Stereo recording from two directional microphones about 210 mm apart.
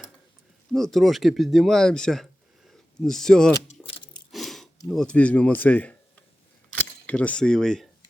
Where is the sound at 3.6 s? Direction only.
25° left (ahead or behind).